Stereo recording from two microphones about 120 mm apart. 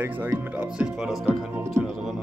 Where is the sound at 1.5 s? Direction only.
20° right (ahead or behind).